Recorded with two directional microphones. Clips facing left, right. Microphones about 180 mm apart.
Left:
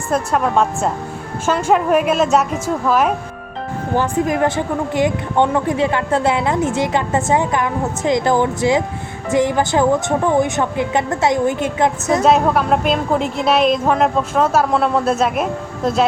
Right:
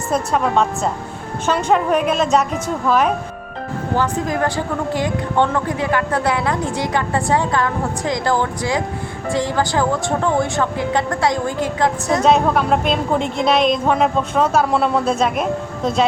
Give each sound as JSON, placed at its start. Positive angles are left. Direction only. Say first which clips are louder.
{"t": 0.1, "sound": "a woman's voice", "louder": "left 1 dB", "side_deg": 0}
{"t": 3.9, "sound": "speech", "louder": "left 3 dB", "side_deg": 20}
{"t": 12.2, "sound": "a woman's voice", "louder": "even", "side_deg": 5}